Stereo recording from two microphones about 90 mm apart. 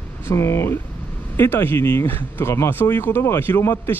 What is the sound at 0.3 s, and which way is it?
Speech, 30° left (ahead or behind).